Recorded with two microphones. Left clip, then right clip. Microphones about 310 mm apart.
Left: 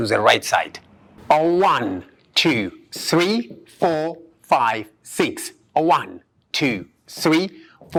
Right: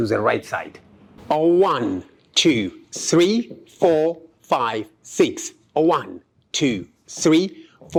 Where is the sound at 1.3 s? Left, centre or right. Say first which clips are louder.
Left 1 dB; left.